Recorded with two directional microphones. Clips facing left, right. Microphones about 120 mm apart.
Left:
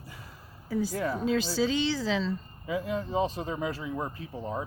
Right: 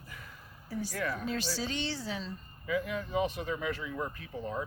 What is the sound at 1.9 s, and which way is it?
Speech, 90° left.